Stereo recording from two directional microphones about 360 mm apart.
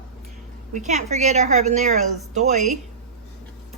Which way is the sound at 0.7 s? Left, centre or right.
Centre.